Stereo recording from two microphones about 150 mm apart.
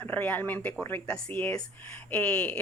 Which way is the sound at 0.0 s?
10° left (ahead or behind).